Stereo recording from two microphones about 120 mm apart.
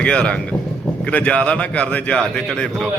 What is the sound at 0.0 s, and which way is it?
A man's voice, 10° left (ahead or behind).